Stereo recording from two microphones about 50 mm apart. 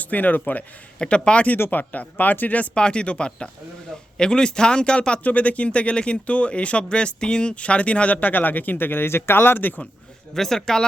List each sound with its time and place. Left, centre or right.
0.0 s speech: left
0.9 s speech: left
1.7 s speech: left
2.7 s speech: centre; by 9.8 s left
10.3 s speech: centre